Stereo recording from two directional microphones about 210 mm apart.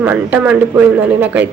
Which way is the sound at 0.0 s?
5° right (ahead or behind).